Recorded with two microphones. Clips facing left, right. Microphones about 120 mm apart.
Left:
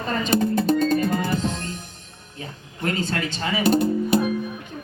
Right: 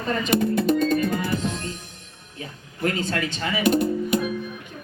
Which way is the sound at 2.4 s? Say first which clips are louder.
Right 2 dB; 30° left (ahead or behind).